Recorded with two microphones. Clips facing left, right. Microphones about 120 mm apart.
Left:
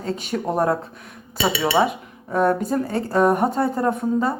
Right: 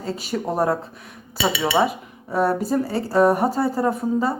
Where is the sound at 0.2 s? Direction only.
5° right (ahead or behind).